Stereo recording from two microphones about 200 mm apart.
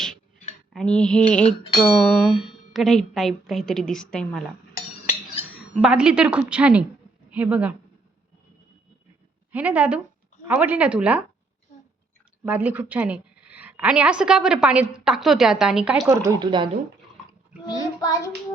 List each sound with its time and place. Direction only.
0.7 s cutlery: 5° left (ahead or behind)
5.8 s cutlery: 5° right (ahead or behind)
7.3 s speech: 5° right (ahead or behind)
9.5 s speech: 10° right (ahead or behind)
12.5 s speech: 10° right (ahead or behind)
12.9 s cutlery: 5° right (ahead or behind)
16.0 s speech: 15° right (ahead or behind)